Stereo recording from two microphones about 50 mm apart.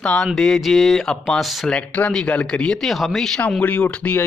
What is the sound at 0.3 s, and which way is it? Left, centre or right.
Speech, centre.